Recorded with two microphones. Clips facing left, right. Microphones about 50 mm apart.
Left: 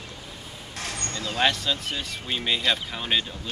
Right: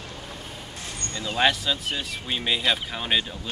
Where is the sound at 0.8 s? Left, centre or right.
Left.